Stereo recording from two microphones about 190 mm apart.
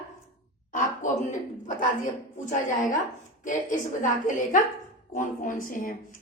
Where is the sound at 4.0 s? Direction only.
45° left (ahead or behind).